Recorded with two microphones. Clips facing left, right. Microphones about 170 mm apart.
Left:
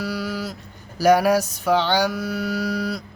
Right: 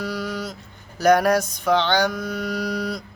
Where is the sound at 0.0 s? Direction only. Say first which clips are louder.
Left 1 dB; 5° left (ahead or behind).